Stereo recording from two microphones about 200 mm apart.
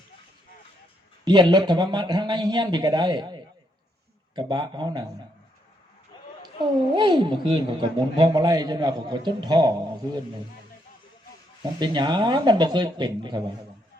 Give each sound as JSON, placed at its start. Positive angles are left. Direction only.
{"t": 1.2, "sound": "a woman's voice", "side_deg": -20}
{"t": 6.6, "sound": "a woman's voice", "side_deg": -20}
{"t": 11.8, "sound": "a woman's voice", "side_deg": -20}